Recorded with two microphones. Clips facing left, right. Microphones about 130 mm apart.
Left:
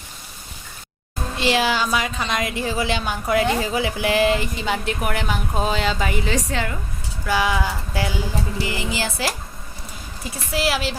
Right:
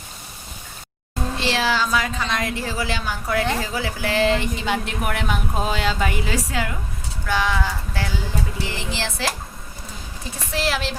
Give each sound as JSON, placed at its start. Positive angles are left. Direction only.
{"t": 1.4, "sound": "a woman's voice", "side_deg": 15}
{"t": 4.5, "sound": "speech", "side_deg": 0}
{"t": 7.3, "sound": "a woman's voice", "side_deg": 5}
{"t": 10.5, "sound": "a woman's voice", "side_deg": 10}